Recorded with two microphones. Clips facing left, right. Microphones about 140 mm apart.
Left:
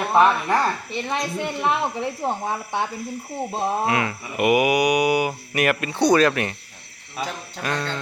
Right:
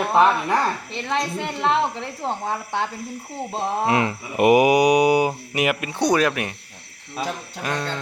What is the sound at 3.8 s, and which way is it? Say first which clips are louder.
Speech: right 2 dB; 30° right (ahead or behind).